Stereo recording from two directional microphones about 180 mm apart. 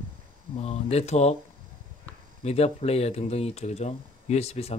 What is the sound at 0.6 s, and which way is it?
Speech, 35° left (ahead or behind).